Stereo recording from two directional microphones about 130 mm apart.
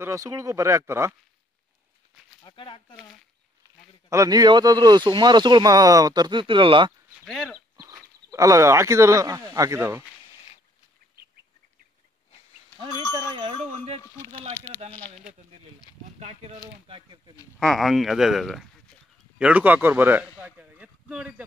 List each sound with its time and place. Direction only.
0.0 s speech: 25° right (ahead or behind)
2.4 s speech: 40° left (ahead or behind)
4.1 s speech: 30° right (ahead or behind)
7.2 s speech: 5° left (ahead or behind)
7.8 s speech: 25° right (ahead or behind)
13.3 s a sound: 50° right (ahead or behind)
14.0 s speech: 25° left (ahead or behind)
16.2 s speech: 55° right (ahead or behind)
16.8 s speech: 45° right (ahead or behind)
17.6 s a man's voice: centre (ahead or behind)